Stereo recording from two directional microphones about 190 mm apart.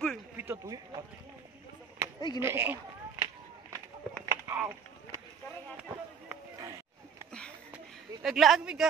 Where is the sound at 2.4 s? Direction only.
10° right (ahead or behind).